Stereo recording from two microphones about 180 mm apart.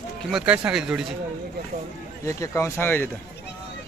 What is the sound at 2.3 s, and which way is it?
Speech, 15° left (ahead or behind).